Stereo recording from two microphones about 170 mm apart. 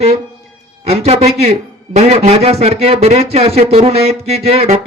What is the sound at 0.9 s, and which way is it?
Speech, 40° right (ahead or behind).